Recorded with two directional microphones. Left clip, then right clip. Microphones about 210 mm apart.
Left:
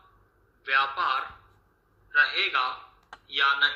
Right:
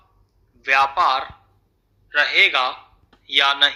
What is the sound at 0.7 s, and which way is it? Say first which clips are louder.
A woman's voice: right 8 dB; 55° right (ahead or behind).